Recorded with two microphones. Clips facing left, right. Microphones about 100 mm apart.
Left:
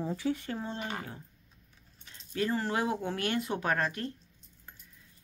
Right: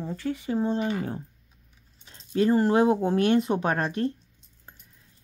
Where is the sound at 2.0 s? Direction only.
30° right (ahead or behind).